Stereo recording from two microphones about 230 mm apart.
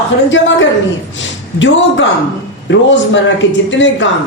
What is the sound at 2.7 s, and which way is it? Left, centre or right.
A woman's voice, left.